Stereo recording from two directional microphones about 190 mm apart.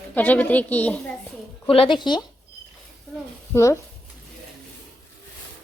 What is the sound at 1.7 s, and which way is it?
Speech, 25° left (ahead or behind).